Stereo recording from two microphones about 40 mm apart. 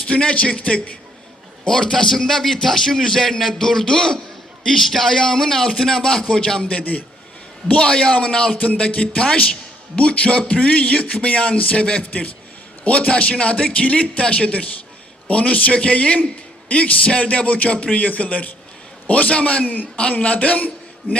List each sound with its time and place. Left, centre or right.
0.1 s speech: left
4.6 s speech: centre
6.7 s a man's voice: left
13.1 s a man's voice: left
19.6 s a man's voice: left
20.1 s a man's voice: left
21.0 s a man's voice: left